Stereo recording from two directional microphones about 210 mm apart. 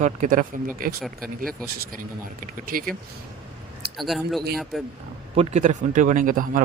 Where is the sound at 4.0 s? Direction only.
Centre (ahead or behind).